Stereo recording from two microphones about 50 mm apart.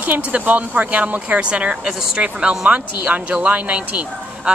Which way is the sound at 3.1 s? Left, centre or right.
Right.